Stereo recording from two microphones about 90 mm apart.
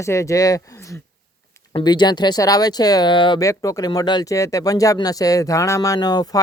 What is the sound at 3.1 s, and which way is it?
Speech, 60° left (ahead or behind).